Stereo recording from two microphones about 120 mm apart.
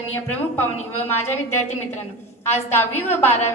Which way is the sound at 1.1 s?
20° left (ahead or behind).